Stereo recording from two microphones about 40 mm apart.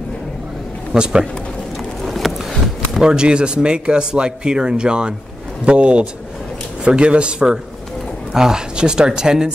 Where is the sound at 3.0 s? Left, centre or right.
Right.